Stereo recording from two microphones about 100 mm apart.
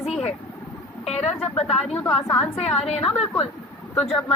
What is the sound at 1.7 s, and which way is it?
Speech, 5° left (ahead or behind).